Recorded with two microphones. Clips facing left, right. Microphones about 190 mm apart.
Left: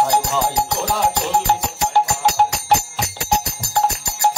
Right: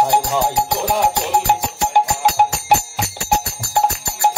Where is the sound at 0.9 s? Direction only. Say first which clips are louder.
Right 2 dB; 15° right (ahead or behind).